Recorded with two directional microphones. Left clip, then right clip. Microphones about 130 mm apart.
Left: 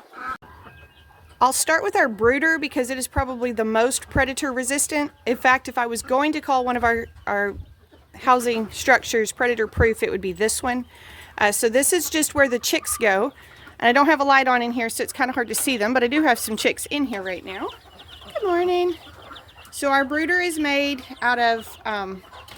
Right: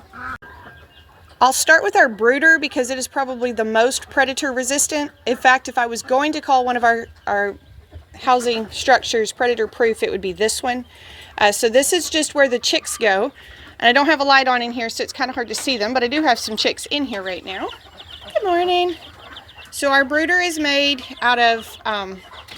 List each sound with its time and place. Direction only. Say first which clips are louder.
1.4 s speech: right 6 dB; 30° left (ahead or behind)
14.8 s speech: right 1 dB; 60° left (ahead or behind)
17.2 s speech: right 3 dB; 30° left (ahead or behind)